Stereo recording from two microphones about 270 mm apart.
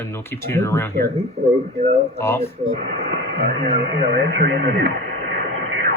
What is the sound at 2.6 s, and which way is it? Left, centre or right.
Speech, right.